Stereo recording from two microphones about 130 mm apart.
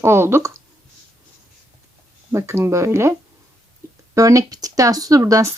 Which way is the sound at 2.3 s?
20° right (ahead or behind).